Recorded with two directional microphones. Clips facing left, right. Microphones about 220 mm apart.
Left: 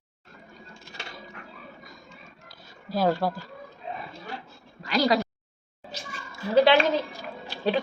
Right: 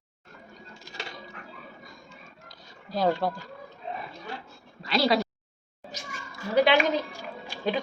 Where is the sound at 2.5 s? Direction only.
5° left (ahead or behind).